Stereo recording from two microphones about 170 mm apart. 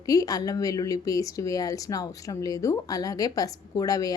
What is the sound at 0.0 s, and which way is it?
A woman's voice, 20° left (ahead or behind).